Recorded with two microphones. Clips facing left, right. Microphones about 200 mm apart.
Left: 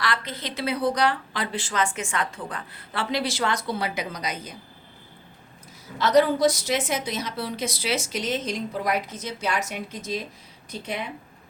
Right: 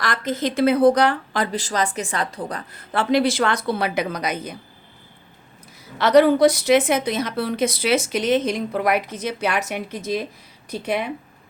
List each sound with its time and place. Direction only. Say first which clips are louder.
0.0 s a woman's voice: right 6 dB; 45° right (ahead or behind)
6.0 s a woman's voice: right 5 dB; 65° right (ahead or behind)